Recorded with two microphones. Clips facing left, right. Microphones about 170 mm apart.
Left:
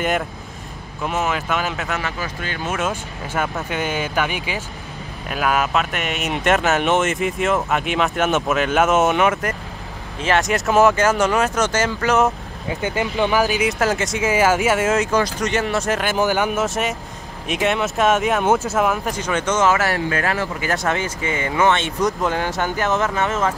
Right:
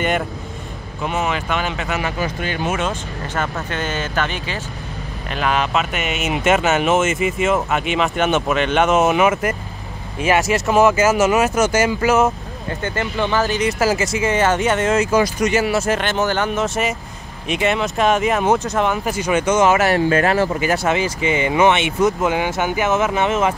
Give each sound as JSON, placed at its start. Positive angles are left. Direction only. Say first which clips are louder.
{"t": 1.0, "sound": "speech", "louder": "right 1 dB", "side_deg": 0}
{"t": 2.0, "sound": "speech", "louder": "right 4 dB", "side_deg": -15}
{"t": 2.7, "sound": "speech", "louder": "right 1 dB", "side_deg": 5}
{"t": 12.6, "sound": "speech", "louder": "left 1 dB", "side_deg": 15}
{"t": 16.0, "sound": "speech", "louder": "even", "side_deg": 5}
{"t": 19.0, "sound": "speech", "louder": "right 4 dB", "side_deg": -10}
{"t": 20.7, "sound": "speech", "louder": "even", "side_deg": -5}
{"t": 21.2, "sound": "speech", "louder": "right 4 dB", "side_deg": -20}